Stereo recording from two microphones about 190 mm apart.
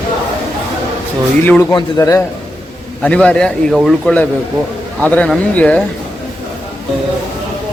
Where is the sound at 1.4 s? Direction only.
10° left (ahead or behind).